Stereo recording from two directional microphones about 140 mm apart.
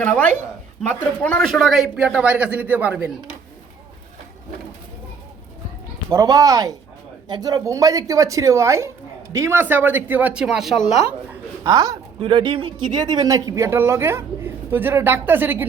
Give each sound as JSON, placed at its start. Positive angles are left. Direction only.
{"t": 0.0, "sound": "a man's voice", "side_deg": 10}
{"t": 6.1, "sound": "speech", "side_deg": -25}
{"t": 11.6, "sound": "speech", "side_deg": -25}
{"t": 12.2, "sound": "speech", "side_deg": -40}